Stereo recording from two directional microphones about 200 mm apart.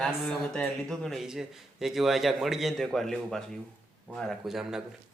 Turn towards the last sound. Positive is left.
turn(degrees=0)  # may be behind; listen again after turning